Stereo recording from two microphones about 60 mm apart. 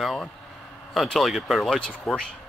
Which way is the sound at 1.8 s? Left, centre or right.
Centre.